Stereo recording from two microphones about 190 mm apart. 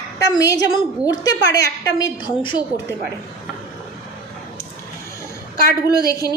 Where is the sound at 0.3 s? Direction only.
20° left (ahead or behind).